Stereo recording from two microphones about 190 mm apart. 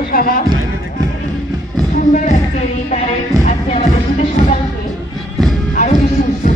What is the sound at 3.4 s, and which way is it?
Music, 35° left (ahead or behind).